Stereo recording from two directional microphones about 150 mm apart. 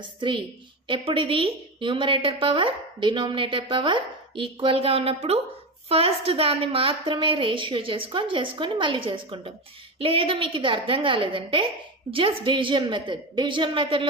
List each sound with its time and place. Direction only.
0.2 s a woman's voice: 30° right (ahead or behind)